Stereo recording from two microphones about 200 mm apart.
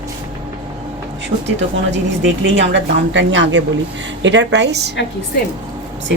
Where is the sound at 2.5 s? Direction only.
65° right (ahead or behind).